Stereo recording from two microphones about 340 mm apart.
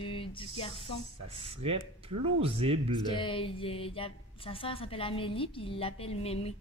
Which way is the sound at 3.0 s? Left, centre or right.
Centre.